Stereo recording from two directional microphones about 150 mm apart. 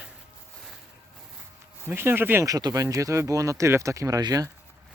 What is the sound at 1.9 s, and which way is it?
Speech, 15° right (ahead or behind).